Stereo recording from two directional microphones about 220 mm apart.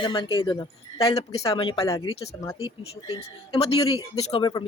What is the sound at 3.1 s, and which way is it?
Speech, 25° left (ahead or behind).